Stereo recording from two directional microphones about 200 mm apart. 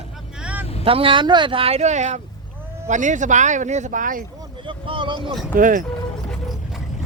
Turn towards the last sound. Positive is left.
turn(degrees=-40)  # may be behind; listen again after turning